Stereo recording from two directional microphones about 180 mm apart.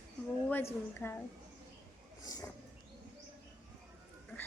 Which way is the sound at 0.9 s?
10° left (ahead or behind).